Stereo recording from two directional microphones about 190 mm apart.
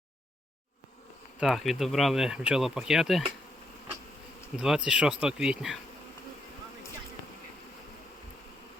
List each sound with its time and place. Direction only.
1.4 s speech: centre (ahead or behind)
4.5 s speech: 5° right (ahead or behind)